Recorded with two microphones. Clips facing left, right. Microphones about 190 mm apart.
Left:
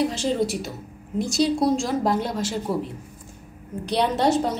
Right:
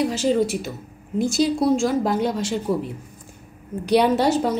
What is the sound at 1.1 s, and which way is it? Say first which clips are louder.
A woman's voice: right 2 dB; centre (ahead or behind).